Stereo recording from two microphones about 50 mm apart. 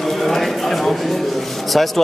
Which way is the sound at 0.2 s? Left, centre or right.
Centre.